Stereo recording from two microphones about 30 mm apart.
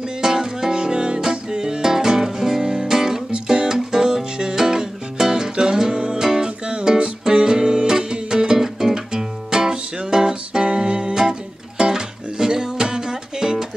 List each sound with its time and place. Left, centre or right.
0.2 s music: centre
8.5 s music: centre
10.6 s music: right
11.9 s music: right